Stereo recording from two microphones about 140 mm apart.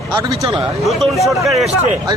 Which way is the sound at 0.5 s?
Centre (ahead or behind).